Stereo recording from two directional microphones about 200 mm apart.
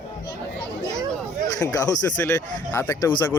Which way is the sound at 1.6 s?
15° left (ahead or behind).